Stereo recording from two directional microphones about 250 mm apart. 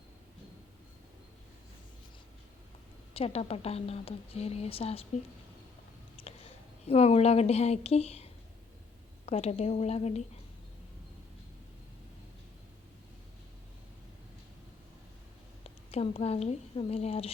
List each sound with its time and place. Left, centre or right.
3.2 s a woman's voice: left
6.2 s a sound: left
6.8 s a woman's voice: left
15.6 s a woman's voice: left